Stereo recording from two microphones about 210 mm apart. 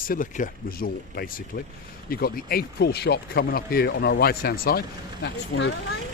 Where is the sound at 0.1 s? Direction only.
40° left (ahead or behind).